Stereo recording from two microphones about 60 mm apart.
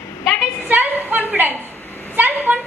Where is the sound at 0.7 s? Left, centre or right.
Right.